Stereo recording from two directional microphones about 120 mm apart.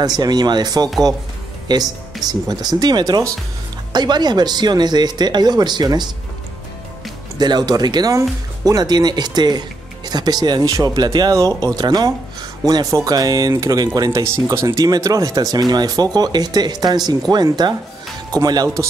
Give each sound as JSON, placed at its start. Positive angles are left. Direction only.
{"t": 0.0, "sound": "speech", "side_deg": -35}
{"t": 7.3, "sound": "speech", "side_deg": -35}